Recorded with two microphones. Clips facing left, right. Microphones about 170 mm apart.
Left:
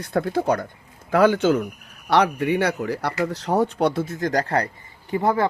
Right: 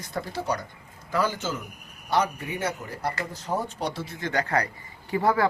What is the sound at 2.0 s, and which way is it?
Speech, 75° left (ahead or behind).